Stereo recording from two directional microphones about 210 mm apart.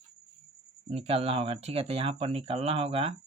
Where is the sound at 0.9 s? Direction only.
30° right (ahead or behind).